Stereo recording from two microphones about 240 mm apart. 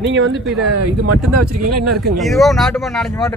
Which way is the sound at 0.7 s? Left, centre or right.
Right.